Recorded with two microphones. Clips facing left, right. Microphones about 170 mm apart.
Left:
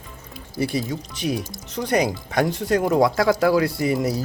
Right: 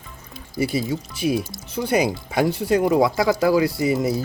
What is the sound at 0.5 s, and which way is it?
Speech, 5° right (ahead or behind).